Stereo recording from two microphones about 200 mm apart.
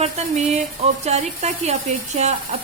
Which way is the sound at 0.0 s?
35° right (ahead or behind).